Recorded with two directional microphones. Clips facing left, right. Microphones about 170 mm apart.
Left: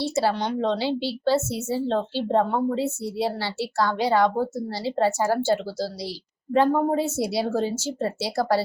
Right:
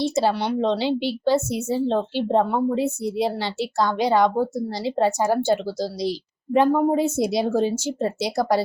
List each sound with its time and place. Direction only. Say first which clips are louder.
0.0 s a woman's voice: right 2 dB; 20° right (ahead or behind)